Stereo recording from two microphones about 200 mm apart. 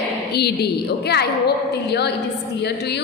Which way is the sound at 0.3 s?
55° left (ahead or behind).